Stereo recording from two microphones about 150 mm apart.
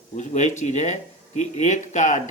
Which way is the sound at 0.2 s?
55° left (ahead or behind).